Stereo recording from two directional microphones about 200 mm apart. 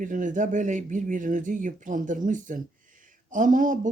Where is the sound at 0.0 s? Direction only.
40° right (ahead or behind).